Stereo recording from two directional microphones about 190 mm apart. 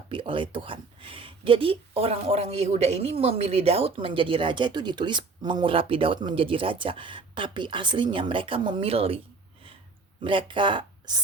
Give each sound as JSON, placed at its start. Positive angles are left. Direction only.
{"t": 0.1, "sound": "speech", "side_deg": -25}